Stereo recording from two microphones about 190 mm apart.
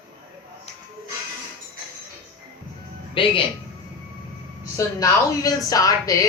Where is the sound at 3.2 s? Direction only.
25° left (ahead or behind).